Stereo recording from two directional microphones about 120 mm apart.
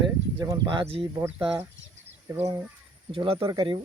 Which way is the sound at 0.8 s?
50° right (ahead or behind).